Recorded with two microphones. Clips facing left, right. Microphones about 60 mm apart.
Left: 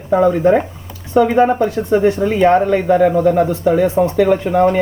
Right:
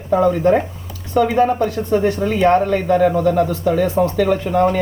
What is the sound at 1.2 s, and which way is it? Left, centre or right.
Speech, left.